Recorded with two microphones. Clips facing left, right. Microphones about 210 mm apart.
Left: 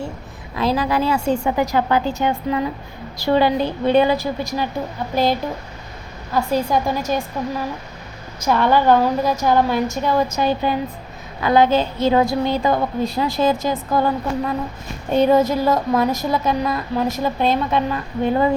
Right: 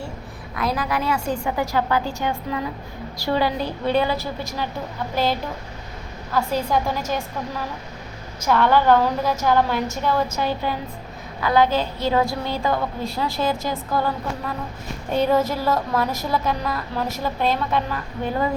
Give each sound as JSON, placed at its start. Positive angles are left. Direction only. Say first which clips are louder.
{"t": 0.5, "sound": "a woman's voice", "louder": "left 5 dB", "side_deg": 30}
{"t": 8.4, "sound": "a woman's voice", "louder": "left 2 dB", "side_deg": 15}